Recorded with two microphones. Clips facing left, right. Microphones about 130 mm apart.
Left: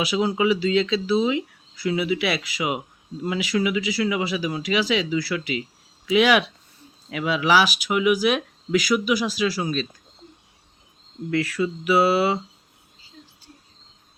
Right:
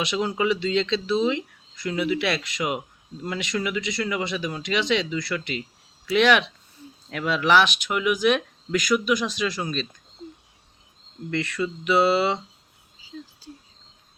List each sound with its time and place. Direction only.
0.0 s speech: 5° left (ahead or behind)
11.3 s speech: 5° left (ahead or behind)
13.0 s whispering: 90° right